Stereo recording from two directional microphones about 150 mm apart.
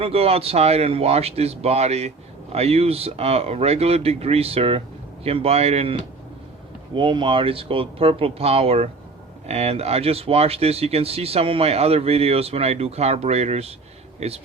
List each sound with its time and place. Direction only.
0.0 s a man's voice: 40° right (ahead or behind)